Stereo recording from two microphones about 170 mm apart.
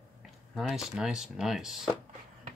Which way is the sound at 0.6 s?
Centre (ahead or behind).